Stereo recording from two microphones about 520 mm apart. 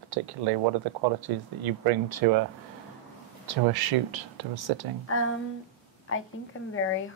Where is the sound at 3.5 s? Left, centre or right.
Right.